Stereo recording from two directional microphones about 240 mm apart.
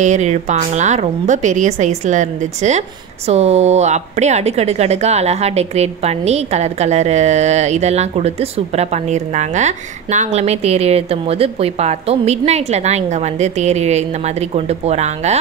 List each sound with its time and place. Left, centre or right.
0.0 s speech: right